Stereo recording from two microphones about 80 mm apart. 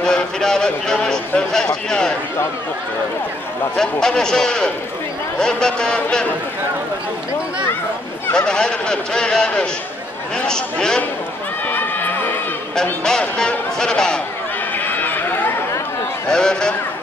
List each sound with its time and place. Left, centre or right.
0.0 s a man's voice: centre
3.7 s a man's voice: centre
8.3 s a man's voice: centre
11.7 s run: left
13.0 s a man's voice: centre
14.9 s run: left
16.3 s a man's voice: centre